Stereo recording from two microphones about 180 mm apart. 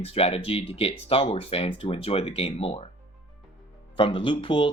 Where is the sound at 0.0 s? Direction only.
35° left (ahead or behind).